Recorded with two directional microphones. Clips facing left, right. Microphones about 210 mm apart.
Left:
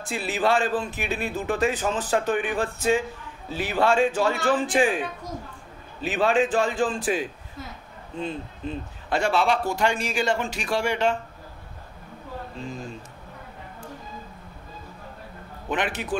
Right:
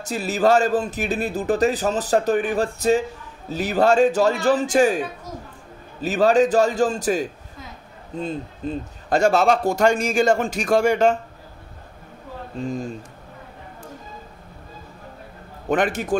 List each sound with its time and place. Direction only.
0.0 s a man's voice: 40° right (ahead or behind)
15.7 s a man's voice: 45° right (ahead or behind)